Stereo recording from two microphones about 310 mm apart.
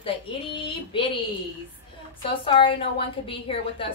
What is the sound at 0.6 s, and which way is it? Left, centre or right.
Speech, centre.